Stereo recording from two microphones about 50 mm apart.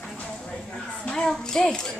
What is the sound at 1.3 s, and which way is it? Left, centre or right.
Speech, centre.